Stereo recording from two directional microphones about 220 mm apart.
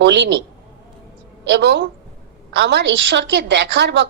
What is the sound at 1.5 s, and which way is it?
A woman's voice, 50° right (ahead or behind).